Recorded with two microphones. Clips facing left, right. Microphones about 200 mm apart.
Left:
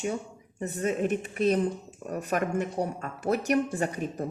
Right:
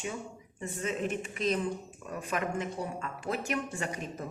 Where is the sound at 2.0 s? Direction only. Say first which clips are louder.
Left 5 dB; 40° left (ahead or behind).